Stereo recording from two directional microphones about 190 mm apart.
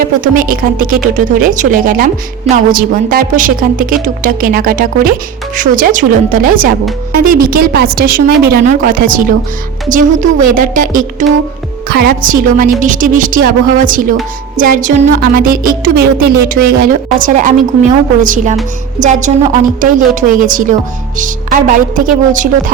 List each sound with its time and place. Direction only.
0.0 s a woman's voice: 45° right (ahead or behind)
15.2 s a woman's voice: 50° right (ahead or behind)